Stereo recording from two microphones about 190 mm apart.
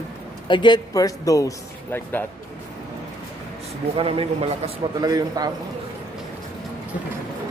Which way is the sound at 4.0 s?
30° right (ahead or behind).